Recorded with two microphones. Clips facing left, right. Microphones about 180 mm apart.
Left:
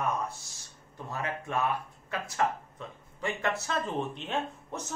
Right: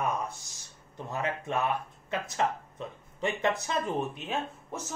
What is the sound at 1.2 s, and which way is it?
Speech, 20° right (ahead or behind).